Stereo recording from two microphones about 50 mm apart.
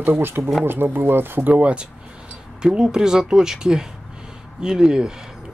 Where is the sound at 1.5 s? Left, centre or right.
Right.